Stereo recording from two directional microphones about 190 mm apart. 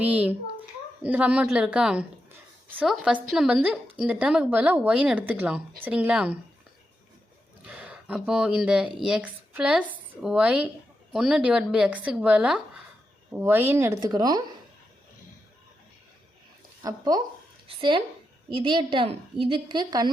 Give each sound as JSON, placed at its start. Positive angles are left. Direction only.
{"t": 0.0, "sound": "a woman's voice", "side_deg": -5}
{"t": 7.7, "sound": "a woman's voice", "side_deg": -10}
{"t": 16.8, "sound": "a woman's voice", "side_deg": -20}